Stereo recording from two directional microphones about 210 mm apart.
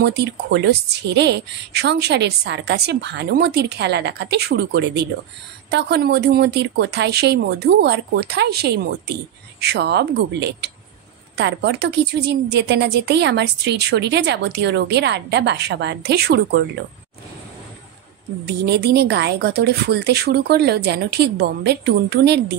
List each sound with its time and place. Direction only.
0.0 s a woman's voice: 55° right (ahead or behind)
18.5 s a woman's voice: 50° right (ahead or behind)